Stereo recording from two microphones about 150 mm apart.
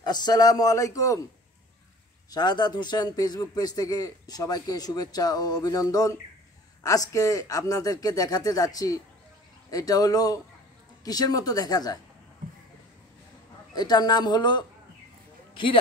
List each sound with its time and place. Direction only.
0.0 s a man's voice: 30° left (ahead or behind)
2.3 s a man's voice: 30° left (ahead or behind)
13.7 s a man's voice: 25° left (ahead or behind)